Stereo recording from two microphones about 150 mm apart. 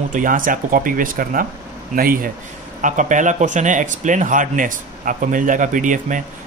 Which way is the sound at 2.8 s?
60° right (ahead or behind).